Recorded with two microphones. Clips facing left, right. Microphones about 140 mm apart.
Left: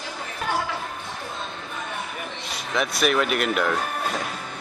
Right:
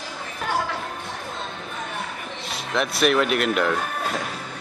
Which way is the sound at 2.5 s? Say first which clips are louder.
Right 1 dB; centre (ahead or behind).